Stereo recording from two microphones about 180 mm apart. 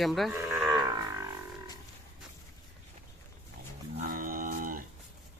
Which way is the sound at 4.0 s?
50° right (ahead or behind).